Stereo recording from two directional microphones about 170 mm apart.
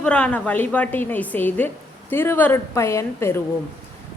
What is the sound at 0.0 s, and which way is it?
Speech, 5° left (ahead or behind).